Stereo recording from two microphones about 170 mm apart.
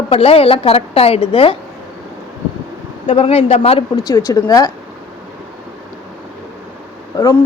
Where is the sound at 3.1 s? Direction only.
35° left (ahead or behind).